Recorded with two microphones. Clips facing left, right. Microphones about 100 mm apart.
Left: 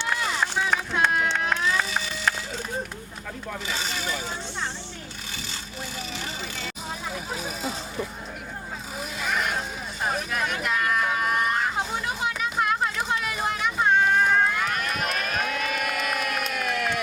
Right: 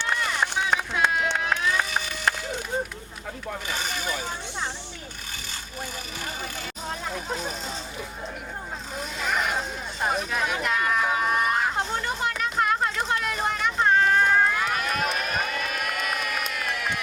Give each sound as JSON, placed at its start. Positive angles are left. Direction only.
{"t": 0.3, "sound": "run", "side_deg": -15}
{"t": 3.8, "sound": "a sound", "side_deg": -15}
{"t": 7.1, "sound": "vehicle", "side_deg": 5}
{"t": 9.0, "sound": "vehicle", "side_deg": 0}